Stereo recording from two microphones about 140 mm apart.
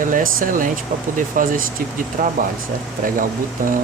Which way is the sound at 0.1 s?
75° right (ahead or behind).